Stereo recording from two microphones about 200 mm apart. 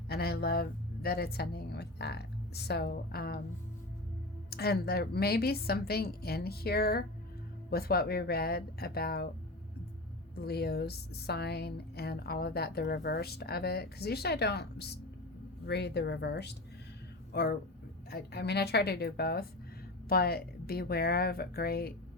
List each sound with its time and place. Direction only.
0.1 s speech: 50° left (ahead or behind)
4.4 s speech: 50° left (ahead or behind)
10.4 s speech: 50° left (ahead or behind)